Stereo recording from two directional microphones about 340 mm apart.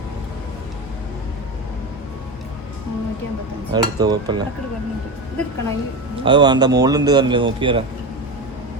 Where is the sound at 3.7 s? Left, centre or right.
Centre.